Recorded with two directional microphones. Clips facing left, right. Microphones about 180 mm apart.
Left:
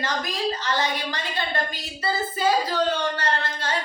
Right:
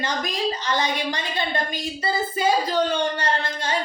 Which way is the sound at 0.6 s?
15° right (ahead or behind).